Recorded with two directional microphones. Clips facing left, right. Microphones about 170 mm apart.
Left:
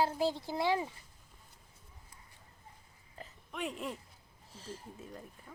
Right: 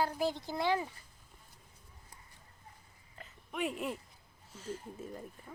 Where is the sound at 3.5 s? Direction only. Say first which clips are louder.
Right 3 dB; 5° right (ahead or behind).